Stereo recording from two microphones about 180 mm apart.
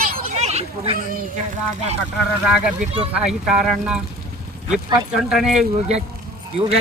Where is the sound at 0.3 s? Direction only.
35° right (ahead or behind).